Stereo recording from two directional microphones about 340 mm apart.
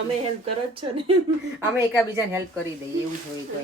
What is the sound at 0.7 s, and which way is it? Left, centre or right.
Speech, centre.